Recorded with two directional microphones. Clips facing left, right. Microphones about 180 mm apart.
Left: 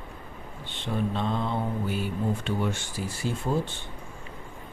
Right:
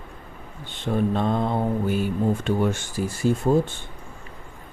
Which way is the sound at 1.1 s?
50° right (ahead or behind).